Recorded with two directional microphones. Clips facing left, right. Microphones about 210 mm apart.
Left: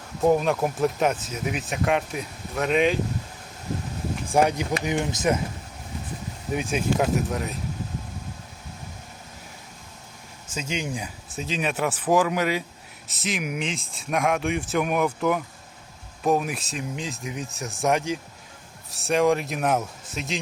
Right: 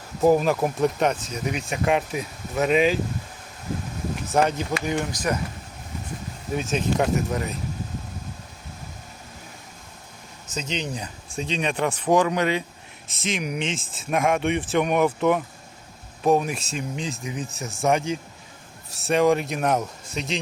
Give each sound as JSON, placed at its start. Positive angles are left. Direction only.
{"t": 0.2, "sound": "speech", "side_deg": 0}
{"t": 4.3, "sound": "speech", "side_deg": 10}
{"t": 6.5, "sound": "speech", "side_deg": 15}
{"t": 6.9, "sound": "speech", "side_deg": 0}
{"t": 10.4, "sound": "speech", "side_deg": 10}